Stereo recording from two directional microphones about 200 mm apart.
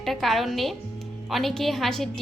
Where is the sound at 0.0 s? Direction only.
Centre (ahead or behind).